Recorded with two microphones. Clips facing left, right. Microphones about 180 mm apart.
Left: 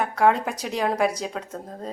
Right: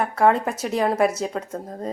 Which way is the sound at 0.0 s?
Centre (ahead or behind).